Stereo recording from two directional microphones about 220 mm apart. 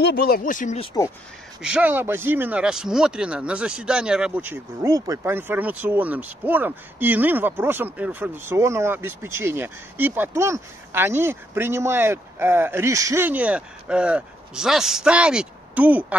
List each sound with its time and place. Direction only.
0.0 s speech: 50° left (ahead or behind)
1.6 s speech: 5° right (ahead or behind)